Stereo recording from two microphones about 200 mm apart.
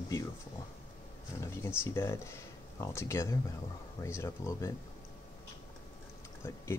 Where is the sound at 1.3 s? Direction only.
15° left (ahead or behind).